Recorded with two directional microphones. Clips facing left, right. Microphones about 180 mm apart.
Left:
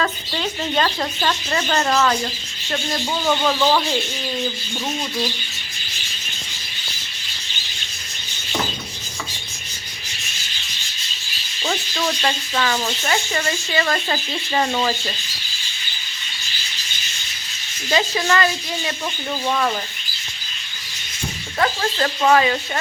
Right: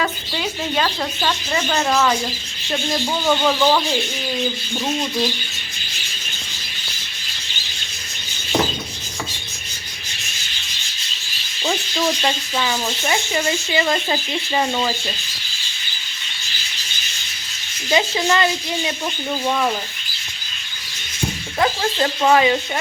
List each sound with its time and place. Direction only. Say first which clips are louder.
0.0 s speech: even; 5° right (ahead or behind)
11.6 s speech: right 2 dB; 10° right (ahead or behind)
17.9 s speech: right 1 dB; 20° right (ahead or behind)
21.6 s speech: right 1 dB; 15° right (ahead or behind)